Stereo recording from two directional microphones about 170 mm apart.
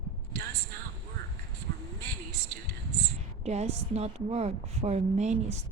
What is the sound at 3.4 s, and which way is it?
A woman's voice, 40° right (ahead or behind).